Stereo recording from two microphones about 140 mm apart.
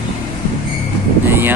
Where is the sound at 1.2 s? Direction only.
15° right (ahead or behind).